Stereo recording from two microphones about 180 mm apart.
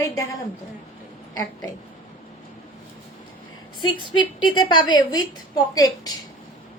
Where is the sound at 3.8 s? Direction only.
25° left (ahead or behind).